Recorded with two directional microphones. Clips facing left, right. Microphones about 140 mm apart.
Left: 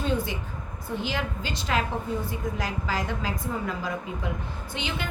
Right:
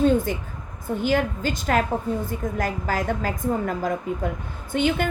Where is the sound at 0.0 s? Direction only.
45° right (ahead or behind).